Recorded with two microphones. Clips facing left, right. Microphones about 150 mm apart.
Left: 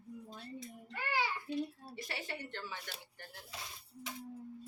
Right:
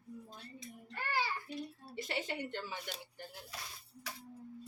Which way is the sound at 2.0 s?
20° right (ahead or behind).